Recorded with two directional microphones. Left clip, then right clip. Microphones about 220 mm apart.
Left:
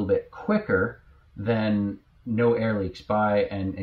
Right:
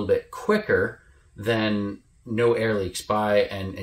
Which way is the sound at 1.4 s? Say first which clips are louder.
Right 2 dB; 15° right (ahead or behind).